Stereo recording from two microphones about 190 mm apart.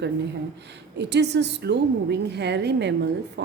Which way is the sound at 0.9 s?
65° right (ahead or behind).